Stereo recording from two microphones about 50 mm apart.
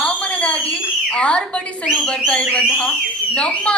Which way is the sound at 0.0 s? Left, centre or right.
Left.